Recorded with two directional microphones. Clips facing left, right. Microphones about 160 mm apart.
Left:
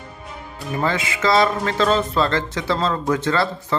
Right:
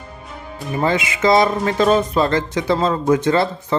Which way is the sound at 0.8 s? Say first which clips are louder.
Right 4 dB; 20° right (ahead or behind).